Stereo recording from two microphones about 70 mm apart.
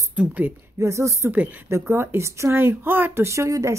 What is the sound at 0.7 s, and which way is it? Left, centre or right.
A woman's voice, right.